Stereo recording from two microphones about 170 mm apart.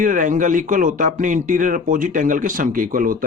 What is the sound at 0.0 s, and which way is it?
A man's voice, 50° right (ahead or behind).